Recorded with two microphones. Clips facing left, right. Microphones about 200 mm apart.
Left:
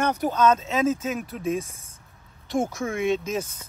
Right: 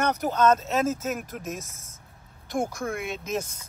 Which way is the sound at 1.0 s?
45° right (ahead or behind).